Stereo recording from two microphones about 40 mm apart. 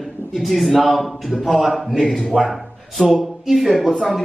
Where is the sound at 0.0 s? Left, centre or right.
Centre.